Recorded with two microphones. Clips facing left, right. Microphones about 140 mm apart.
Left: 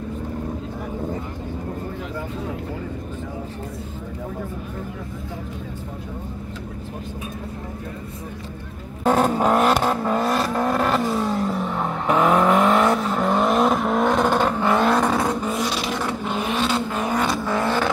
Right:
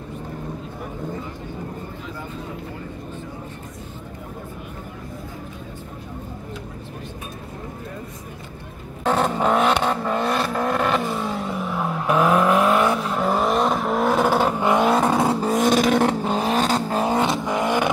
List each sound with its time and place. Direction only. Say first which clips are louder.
9.0 s vehicle: left 2 dB; 10° left (ahead or behind)
15.4 s vehicle: right 6 dB; 45° right (ahead or behind)
16.2 s vehicle: right 3 dB; 35° right (ahead or behind); by 17.8 s 15° right (ahead or behind)